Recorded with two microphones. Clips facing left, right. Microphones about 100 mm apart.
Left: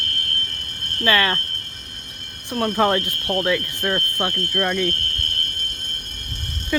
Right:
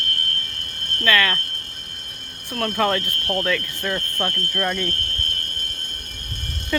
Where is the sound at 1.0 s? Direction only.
30° left (ahead or behind).